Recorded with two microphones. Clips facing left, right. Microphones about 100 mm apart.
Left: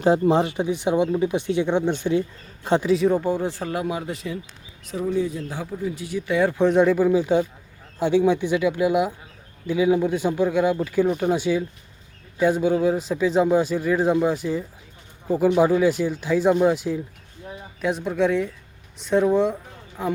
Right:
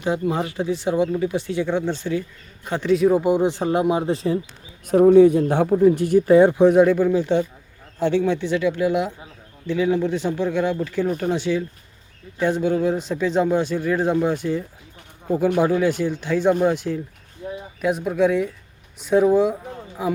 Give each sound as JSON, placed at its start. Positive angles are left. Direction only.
{"t": 0.0, "sound": "speech", "side_deg": 30}
{"t": 2.8, "sound": "a man's voice", "side_deg": 0}
{"t": 3.2, "sound": "speech", "side_deg": -15}
{"t": 4.9, "sound": "speech", "side_deg": -60}
{"t": 6.3, "sound": "speech", "side_deg": -25}
{"t": 6.6, "sound": "a man's voice", "side_deg": -5}